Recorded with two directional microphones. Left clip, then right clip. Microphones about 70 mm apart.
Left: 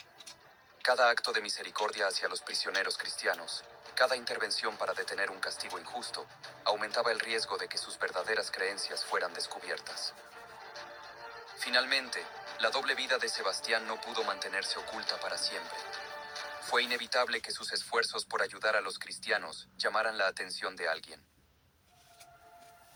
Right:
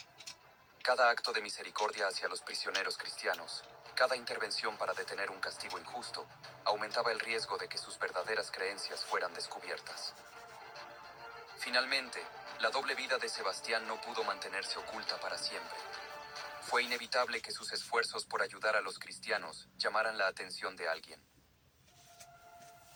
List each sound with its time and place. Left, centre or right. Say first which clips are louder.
0.8 s speech: left 3 dB; left